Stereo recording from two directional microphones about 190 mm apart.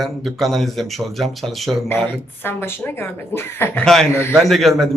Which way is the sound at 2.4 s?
10° left (ahead or behind).